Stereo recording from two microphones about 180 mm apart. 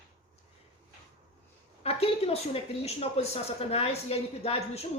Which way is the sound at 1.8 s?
35° left (ahead or behind).